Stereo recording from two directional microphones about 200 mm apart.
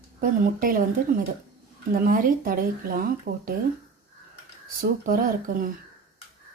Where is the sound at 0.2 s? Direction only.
45° right (ahead or behind).